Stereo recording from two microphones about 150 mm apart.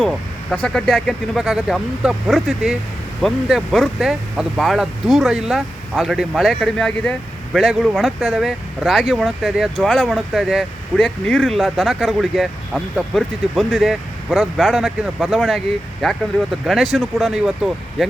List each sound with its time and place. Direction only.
0.0 s speech: 5° left (ahead or behind)